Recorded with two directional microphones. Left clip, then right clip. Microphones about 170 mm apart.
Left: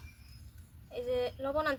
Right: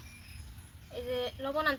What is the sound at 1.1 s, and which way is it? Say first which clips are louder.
Speech: left 1 dB; 30° left (ahead or behind).